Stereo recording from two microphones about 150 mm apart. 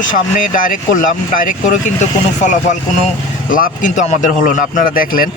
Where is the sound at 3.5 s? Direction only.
65° left (ahead or behind).